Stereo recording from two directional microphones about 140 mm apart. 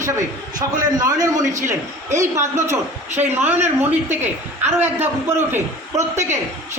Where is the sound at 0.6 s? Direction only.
25° right (ahead or behind).